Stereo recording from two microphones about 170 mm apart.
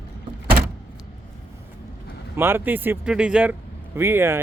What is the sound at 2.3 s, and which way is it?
Speech, 15° right (ahead or behind).